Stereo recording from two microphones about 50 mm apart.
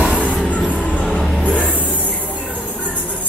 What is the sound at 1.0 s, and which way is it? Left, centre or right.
Music, centre.